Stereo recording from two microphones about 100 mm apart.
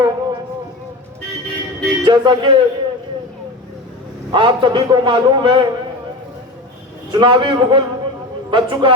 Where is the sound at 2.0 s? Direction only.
50° right (ahead or behind).